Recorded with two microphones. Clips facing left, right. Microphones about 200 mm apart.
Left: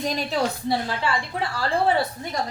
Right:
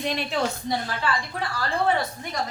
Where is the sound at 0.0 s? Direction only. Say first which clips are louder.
Left 2 dB; 40° left (ahead or behind).